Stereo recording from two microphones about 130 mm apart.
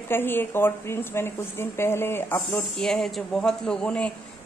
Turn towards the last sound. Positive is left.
turn(degrees=10)  # may be behind; listen again after turning